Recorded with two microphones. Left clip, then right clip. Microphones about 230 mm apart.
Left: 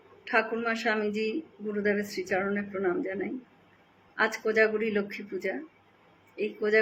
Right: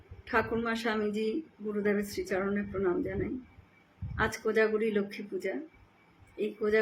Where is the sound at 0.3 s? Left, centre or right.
Centre.